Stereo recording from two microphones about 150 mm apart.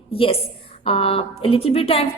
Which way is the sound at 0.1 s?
40° left (ahead or behind).